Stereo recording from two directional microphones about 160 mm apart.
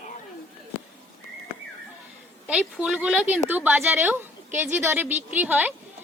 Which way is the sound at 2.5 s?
5° right (ahead or behind).